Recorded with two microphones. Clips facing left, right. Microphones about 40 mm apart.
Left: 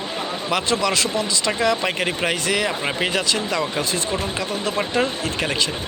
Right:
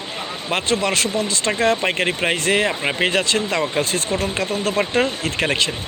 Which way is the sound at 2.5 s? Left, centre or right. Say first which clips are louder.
Right 3 dB; right.